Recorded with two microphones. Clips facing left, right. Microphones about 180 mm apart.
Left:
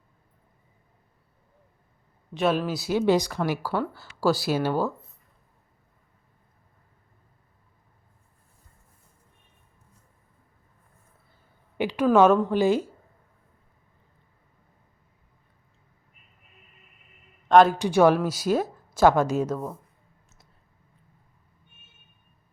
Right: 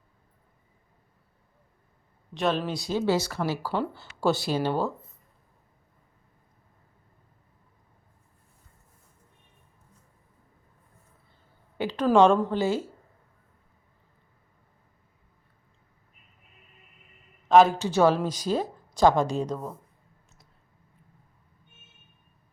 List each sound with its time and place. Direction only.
2.3 s speech: 5° left (ahead or behind)
3.1 s speech: 15° left (ahead or behind)
11.8 s a sound: 15° left (ahead or behind)
12.1 s speech: 5° left (ahead or behind)
12.5 s speech: 15° left (ahead or behind)
17.5 s speech: centre (ahead or behind)
17.7 s speech: 15° left (ahead or behind)